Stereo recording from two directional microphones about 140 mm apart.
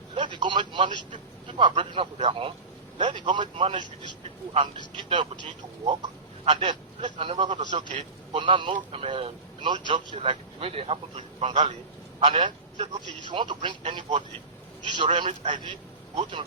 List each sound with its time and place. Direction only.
0.1 s a man's voice: 35° right (ahead or behind)
1.1 s vehicle: 35° right (ahead or behind)
1.7 s a man's voice: 40° right (ahead or behind)
12.7 s a man's voice: 55° right (ahead or behind)
13.2 s a man's voice: 35° right (ahead or behind)